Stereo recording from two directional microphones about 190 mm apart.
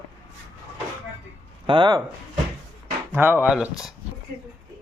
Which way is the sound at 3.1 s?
10° right (ahead or behind).